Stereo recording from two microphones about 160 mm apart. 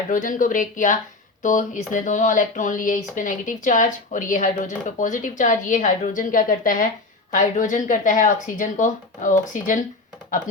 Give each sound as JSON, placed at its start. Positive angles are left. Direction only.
{"t": 0.1, "sound": "speech", "side_deg": 55}